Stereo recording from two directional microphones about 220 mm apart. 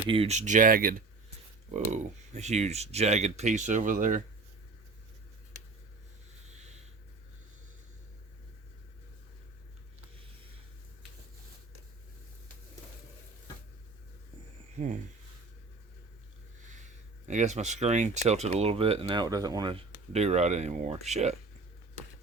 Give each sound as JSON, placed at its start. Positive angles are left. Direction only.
{"t": 0.1, "sound": "speech", "side_deg": -30}
{"t": 14.8, "sound": "speech", "side_deg": -30}
{"t": 17.2, "sound": "speech", "side_deg": -30}
{"t": 20.1, "sound": "speech", "side_deg": -30}